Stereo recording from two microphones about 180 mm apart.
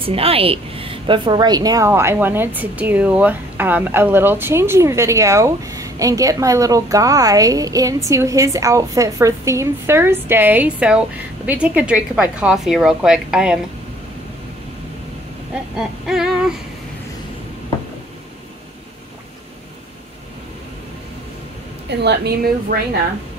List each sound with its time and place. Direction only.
0.0 s a woman's voice: 30° right (ahead or behind); by 13.6 s 5° right (ahead or behind)
16.1 s female singing: centre (ahead or behind)
21.8 s a woman's voice: 70° right (ahead or behind)